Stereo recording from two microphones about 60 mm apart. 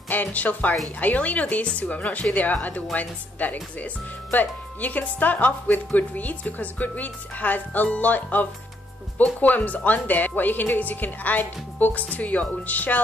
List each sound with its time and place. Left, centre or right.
0.1 s speech: left